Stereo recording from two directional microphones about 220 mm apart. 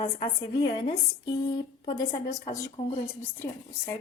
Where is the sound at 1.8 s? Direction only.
15° left (ahead or behind).